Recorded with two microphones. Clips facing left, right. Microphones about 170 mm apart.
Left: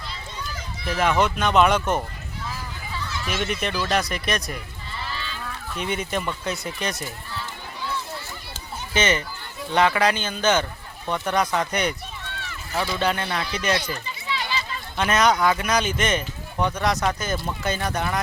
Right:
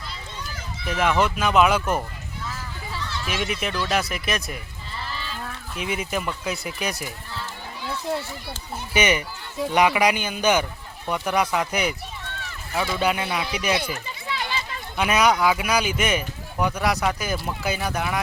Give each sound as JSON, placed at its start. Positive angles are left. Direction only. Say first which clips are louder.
{"t": 0.9, "sound": "speech", "louder": "even", "side_deg": -5}
{"t": 3.2, "sound": "speech", "louder": "left 1 dB", "side_deg": -10}
{"t": 5.7, "sound": "speech", "louder": "left 1 dB", "side_deg": -5}
{"t": 8.9, "sound": "speech", "louder": "right 1 dB", "side_deg": -15}
{"t": 14.3, "sound": "children playing", "louder": "left 1 dB", "side_deg": -50}
{"t": 14.9, "sound": "speech", "louder": "even", "side_deg": -10}